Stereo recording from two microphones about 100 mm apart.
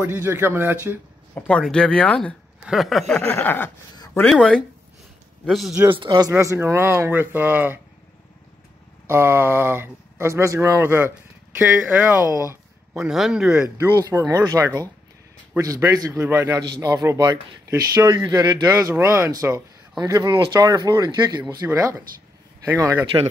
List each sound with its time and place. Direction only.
0.0 s speech: 20° right (ahead or behind)
1.3 s speech: 10° left (ahead or behind)
2.6 s speech: centre (ahead or behind)
3.2 s chuckle: 15° left (ahead or behind)
4.1 s speech: 5° left (ahead or behind)
5.9 s speech: 45° right (ahead or behind)
6.3 s speech: 25° right (ahead or behind)
9.0 s speech: 25° right (ahead or behind)
12.9 s speech: 5° right (ahead or behind)
14.1 s a man's voice: 35° right (ahead or behind)
20.2 s speech: 55° right (ahead or behind)
20.6 s a man's voice: 40° right (ahead or behind)
21.0 s speech: 50° right (ahead or behind)
21.6 s a man's voice: 35° right (ahead or behind)